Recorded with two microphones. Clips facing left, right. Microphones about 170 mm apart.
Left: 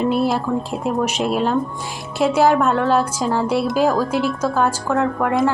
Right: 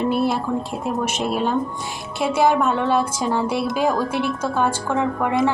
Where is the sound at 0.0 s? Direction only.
5° left (ahead or behind).